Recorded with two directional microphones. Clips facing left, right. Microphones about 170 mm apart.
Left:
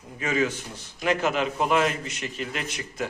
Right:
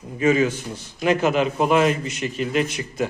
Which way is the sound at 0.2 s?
15° right (ahead or behind).